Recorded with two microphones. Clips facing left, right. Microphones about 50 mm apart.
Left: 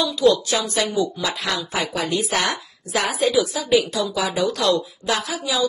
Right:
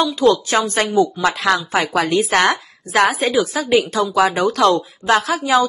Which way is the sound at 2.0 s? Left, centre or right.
Right.